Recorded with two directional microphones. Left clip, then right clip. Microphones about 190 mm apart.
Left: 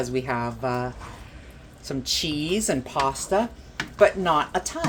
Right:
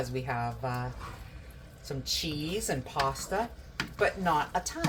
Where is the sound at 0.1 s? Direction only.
60° left (ahead or behind).